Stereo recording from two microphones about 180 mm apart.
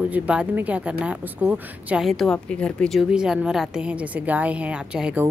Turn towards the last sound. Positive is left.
turn(degrees=-10)  # may be behind; listen again after turning